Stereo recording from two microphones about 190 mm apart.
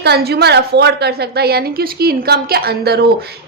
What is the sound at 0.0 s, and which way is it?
A man's voice, 55° right (ahead or behind).